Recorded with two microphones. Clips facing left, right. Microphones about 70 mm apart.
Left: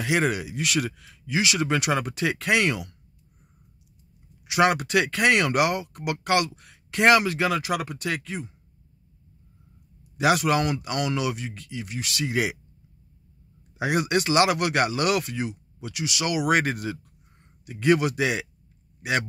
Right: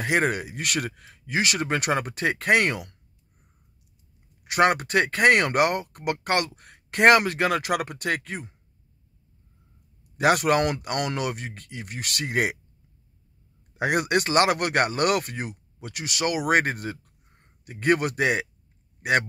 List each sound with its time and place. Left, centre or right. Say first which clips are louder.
0.0 s speech: even; right
4.5 s speech: even; right
10.1 s speech: right 1 dB; right
13.7 s speech: right 1 dB; right